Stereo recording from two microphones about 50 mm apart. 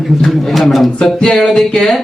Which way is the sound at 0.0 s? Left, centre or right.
Centre.